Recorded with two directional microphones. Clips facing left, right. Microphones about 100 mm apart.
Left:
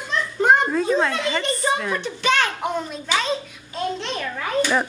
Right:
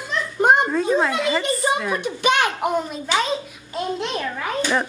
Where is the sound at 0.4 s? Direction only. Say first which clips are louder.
Right 1 dB; 20° right (ahead or behind).